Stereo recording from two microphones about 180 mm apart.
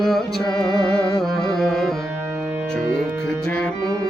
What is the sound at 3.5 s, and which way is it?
Music, 5° left (ahead or behind).